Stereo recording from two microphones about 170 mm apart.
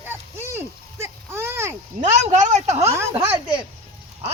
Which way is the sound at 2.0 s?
45° right (ahead or behind).